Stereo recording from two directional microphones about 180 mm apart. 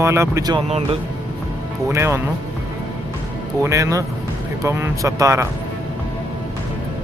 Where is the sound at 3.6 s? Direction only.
15° right (ahead or behind).